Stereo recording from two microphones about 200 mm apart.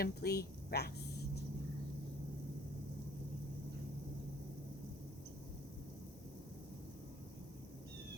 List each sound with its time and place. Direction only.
0.0 s a woman's voice: 50° left (ahead or behind)